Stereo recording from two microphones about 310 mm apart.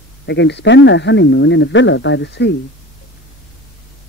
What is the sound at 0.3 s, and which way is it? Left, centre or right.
Speech, left.